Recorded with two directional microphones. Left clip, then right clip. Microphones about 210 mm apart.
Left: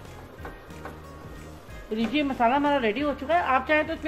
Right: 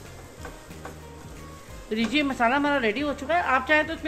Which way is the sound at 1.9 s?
10° right (ahead or behind).